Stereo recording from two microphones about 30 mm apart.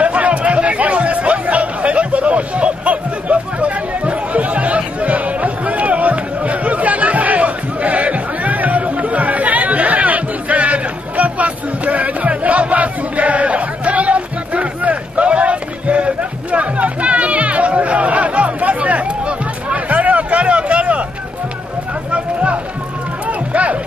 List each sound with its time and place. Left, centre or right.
0.0 s chatter: right
8.8 s chatter: right
15.2 s music: right
22.1 s music: right
23.2 s run: right